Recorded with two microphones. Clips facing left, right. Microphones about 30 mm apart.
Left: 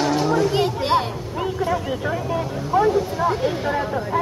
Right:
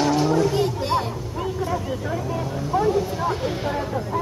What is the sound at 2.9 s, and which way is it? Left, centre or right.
Speech, centre.